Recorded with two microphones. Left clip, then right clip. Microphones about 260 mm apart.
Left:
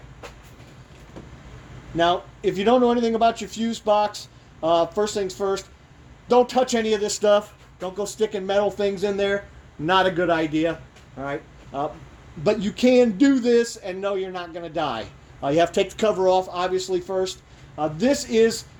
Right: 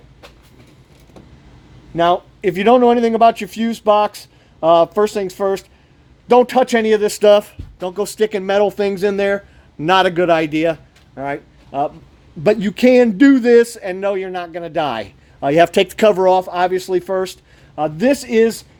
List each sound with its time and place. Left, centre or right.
2.0 s speech: right
5.0 s speech: right